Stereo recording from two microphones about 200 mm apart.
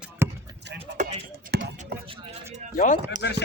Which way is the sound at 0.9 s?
60° right (ahead or behind).